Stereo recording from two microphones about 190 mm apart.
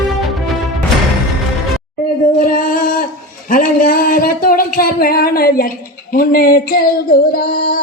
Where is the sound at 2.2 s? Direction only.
45° left (ahead or behind).